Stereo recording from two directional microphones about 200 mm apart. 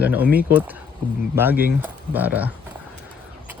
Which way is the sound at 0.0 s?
10° right (ahead or behind).